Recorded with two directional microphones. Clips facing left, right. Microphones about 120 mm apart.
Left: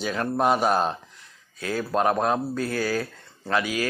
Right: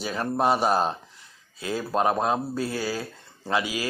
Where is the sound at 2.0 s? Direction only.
30° right (ahead or behind).